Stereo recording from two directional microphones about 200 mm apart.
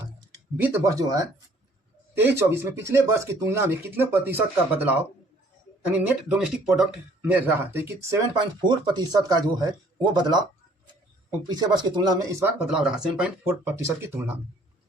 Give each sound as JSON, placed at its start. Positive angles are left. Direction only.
{"t": 0.5, "sound": "speech", "side_deg": -15}
{"t": 11.4, "sound": "speech", "side_deg": -20}
{"t": 12.7, "sound": "speech", "side_deg": -5}